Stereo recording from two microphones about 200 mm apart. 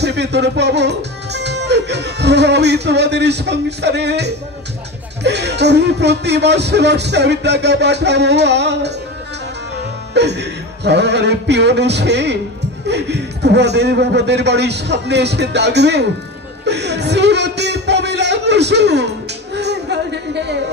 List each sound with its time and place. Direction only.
0.0 s speech: 60° right (ahead or behind)
10.1 s speech: 60° right (ahead or behind)